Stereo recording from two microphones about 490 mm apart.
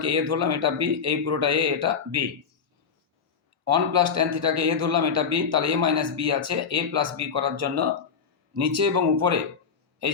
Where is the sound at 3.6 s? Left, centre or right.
Right.